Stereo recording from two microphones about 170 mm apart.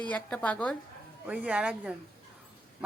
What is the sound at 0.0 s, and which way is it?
Speech, 10° left (ahead or behind).